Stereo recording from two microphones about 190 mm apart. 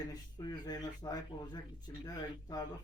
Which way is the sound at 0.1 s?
20° left (ahead or behind).